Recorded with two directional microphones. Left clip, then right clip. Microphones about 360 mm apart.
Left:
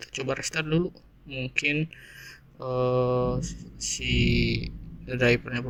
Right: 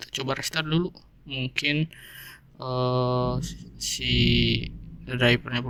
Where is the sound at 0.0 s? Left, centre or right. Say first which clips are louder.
Right 1 dB; right.